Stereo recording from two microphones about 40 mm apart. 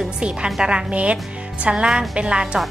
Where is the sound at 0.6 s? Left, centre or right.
Right.